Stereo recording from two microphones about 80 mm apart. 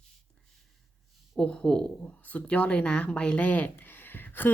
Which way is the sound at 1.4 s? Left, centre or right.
Centre.